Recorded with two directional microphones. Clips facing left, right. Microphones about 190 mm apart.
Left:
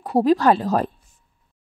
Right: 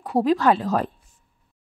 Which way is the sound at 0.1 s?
35° left (ahead or behind).